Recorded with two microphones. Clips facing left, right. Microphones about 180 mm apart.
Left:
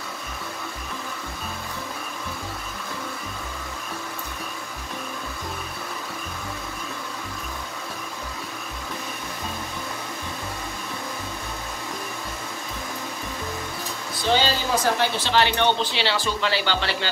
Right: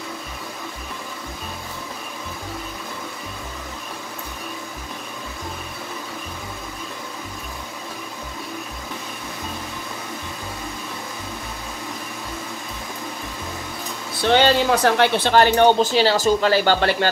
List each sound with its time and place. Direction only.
14.3 s speech: 65° right (ahead or behind); by 17.1 s 45° right (ahead or behind)